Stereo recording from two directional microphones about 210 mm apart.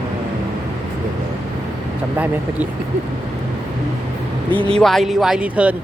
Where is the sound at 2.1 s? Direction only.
10° right (ahead or behind).